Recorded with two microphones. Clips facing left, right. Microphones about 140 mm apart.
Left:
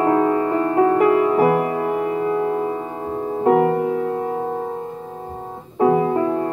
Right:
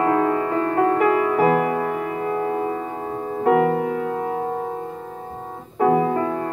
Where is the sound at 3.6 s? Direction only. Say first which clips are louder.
Left 2 dB; 30° left (ahead or behind).